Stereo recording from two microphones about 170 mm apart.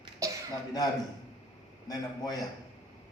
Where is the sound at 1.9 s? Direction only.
20° left (ahead or behind).